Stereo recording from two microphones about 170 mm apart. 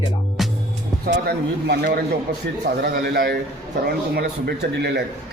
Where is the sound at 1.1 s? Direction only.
70° right (ahead or behind).